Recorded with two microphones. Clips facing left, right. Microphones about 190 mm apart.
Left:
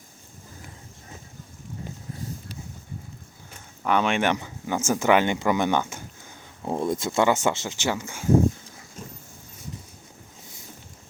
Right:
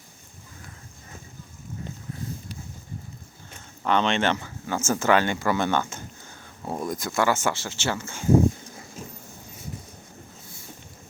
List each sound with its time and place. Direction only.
3.8 s speech: 10° left (ahead or behind)
6.7 s speech: 25° left (ahead or behind)